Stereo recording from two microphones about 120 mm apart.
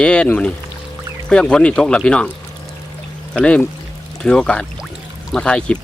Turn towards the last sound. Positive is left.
turn(degrees=10)  # may be behind; listen again after turning